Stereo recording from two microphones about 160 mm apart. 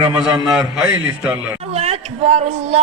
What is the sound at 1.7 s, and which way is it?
Speech, 40° right (ahead or behind).